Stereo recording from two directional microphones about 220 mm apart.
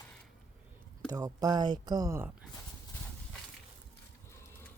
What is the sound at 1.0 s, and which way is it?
Speech, 15° right (ahead or behind).